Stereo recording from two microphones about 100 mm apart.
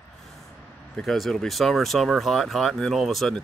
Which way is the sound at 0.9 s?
Centre (ahead or behind).